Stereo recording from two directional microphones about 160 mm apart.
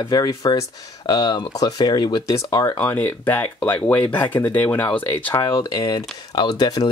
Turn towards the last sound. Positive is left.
turn(degrees=25)  # may be behind; listen again after turning